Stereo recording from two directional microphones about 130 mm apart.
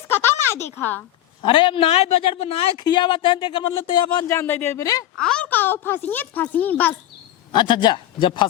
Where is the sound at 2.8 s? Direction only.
35° left (ahead or behind).